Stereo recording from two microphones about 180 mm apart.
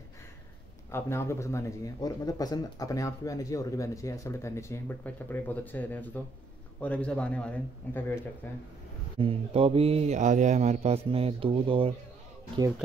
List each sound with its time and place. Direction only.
0.9 s speech: 15° left (ahead or behind)
9.2 s speech: 30° right (ahead or behind)